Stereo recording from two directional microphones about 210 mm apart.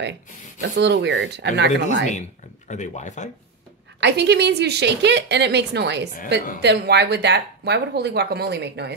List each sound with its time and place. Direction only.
0.0 s speech: 55° right (ahead or behind)
2.7 s speech: 35° left (ahead or behind)
4.0 s speech: 50° right (ahead or behind)